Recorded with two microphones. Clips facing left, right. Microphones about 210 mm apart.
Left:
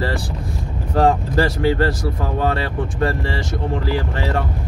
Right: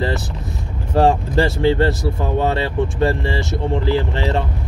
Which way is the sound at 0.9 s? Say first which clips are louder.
Right 1 dB; 25° right (ahead or behind).